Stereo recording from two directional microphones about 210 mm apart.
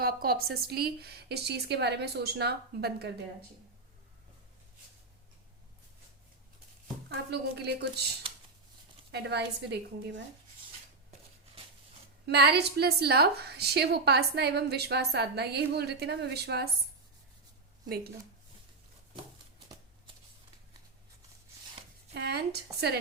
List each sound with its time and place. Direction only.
0.0 s a woman's voice: 45° right (ahead or behind)
7.1 s a woman's voice: 50° right (ahead or behind)
8.2 s a sound: 25° right (ahead or behind)
9.1 s a woman's voice: 50° right (ahead or behind)
12.2 s a woman's voice: 50° right (ahead or behind)
17.8 s a woman's voice: 50° right (ahead or behind)
22.1 s a woman's voice: 50° right (ahead or behind)